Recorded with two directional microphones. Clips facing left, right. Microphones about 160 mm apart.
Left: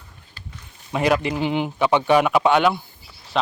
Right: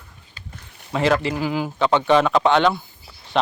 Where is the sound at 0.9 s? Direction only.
15° left (ahead or behind).